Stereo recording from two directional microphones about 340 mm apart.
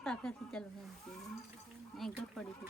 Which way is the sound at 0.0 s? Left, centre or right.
Centre.